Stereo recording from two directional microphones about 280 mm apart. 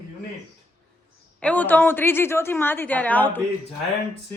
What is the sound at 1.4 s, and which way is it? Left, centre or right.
Speech, centre.